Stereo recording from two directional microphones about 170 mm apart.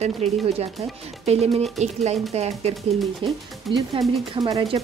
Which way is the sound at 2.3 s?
40° right (ahead or behind).